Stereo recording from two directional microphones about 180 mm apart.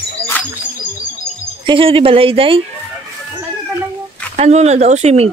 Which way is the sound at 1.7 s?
30° right (ahead or behind).